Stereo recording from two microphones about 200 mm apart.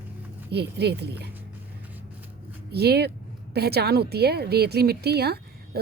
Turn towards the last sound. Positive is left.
turn(degrees=-55)  # may be behind; listen again after turning